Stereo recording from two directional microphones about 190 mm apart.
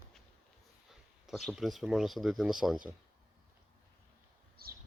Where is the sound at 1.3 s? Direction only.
Centre (ahead or behind).